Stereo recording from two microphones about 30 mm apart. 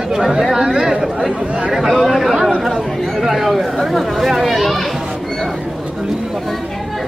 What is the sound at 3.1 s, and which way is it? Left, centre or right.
Speech, centre.